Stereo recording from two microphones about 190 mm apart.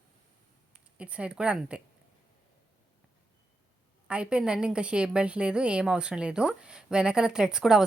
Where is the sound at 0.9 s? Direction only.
5° right (ahead or behind).